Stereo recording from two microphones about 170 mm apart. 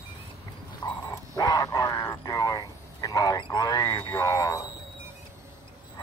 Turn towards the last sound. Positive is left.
turn(degrees=20)  # may be behind; listen again after turning